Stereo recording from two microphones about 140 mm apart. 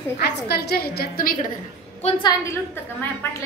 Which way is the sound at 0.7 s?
90° left.